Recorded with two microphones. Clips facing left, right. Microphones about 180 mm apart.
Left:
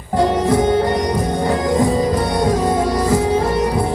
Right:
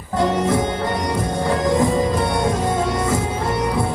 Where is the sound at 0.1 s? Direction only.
25° left (ahead or behind).